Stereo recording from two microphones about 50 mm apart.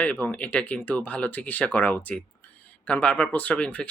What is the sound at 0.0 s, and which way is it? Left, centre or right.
Speech, left.